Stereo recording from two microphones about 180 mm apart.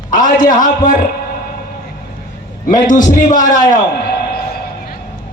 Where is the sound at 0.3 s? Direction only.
45° left (ahead or behind).